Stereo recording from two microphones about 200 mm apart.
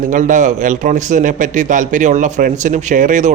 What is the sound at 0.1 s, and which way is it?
Speech, 40° right (ahead or behind).